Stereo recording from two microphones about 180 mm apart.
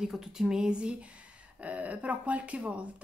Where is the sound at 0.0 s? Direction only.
5° right (ahead or behind).